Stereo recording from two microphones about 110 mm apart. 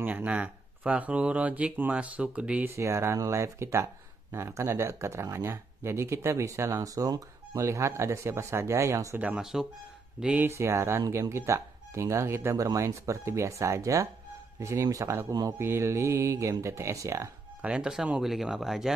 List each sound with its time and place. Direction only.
0.0 s speech: 15° right (ahead or behind)
2.7 s speech: 25° right (ahead or behind)
9.2 s speech: 10° right (ahead or behind)
10.5 s speech: 25° right (ahead or behind)
15.6 s speech: 25° right (ahead or behind)
17.6 s speech: 10° right (ahead or behind)